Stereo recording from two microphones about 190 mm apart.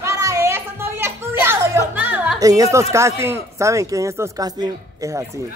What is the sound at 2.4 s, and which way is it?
Speech, 20° right (ahead or behind).